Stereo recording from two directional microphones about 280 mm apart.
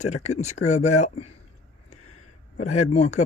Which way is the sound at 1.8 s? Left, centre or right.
Left.